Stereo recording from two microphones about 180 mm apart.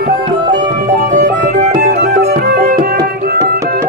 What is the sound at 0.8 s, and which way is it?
Music, 45° right (ahead or behind).